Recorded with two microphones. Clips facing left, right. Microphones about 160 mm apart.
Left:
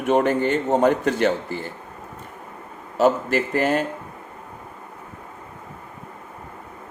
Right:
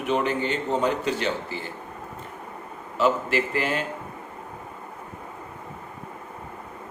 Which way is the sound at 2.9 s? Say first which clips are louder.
Left 4 dB; 45° left (ahead or behind).